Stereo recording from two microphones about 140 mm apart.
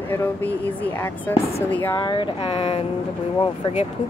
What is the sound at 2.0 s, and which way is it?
Speech, 35° left (ahead or behind).